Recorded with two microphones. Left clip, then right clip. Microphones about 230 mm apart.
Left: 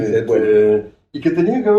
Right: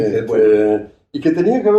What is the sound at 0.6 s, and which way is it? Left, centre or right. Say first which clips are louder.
Speech: left 2 dB; right.